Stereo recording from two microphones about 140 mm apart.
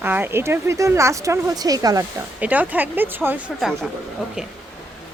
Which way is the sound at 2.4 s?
10° right (ahead or behind).